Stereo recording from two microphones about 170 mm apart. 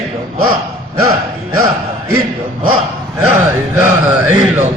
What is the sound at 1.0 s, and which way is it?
Speech, 20° right (ahead or behind).